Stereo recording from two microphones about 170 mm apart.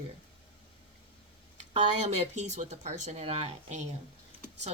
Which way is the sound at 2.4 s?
45° right (ahead or behind).